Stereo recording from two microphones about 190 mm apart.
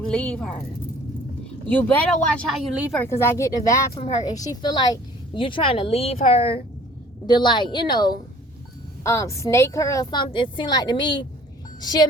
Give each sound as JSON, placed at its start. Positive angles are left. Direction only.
{"t": 0.1, "sound": "a woman's voice", "side_deg": 5}
{"t": 1.8, "sound": "speech", "side_deg": 10}
{"t": 2.3, "sound": "a woman's voice", "side_deg": -5}
{"t": 3.0, "sound": "a woman's voice", "side_deg": 10}